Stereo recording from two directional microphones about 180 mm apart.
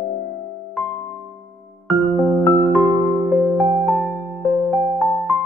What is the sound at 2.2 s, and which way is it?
Music, 20° left (ahead or behind).